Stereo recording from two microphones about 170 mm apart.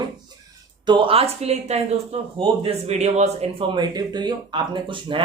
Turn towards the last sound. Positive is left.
turn(degrees=-30)  # may be behind; listen again after turning